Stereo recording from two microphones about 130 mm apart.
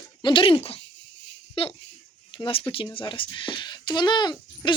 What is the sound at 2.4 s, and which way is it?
A child's voice, 45° left (ahead or behind).